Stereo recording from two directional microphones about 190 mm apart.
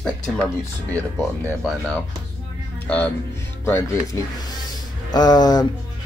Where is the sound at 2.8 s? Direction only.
5° left (ahead or behind).